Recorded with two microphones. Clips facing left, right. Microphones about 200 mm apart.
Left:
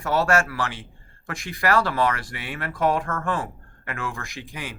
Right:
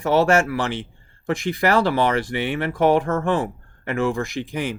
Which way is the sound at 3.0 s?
20° right (ahead or behind).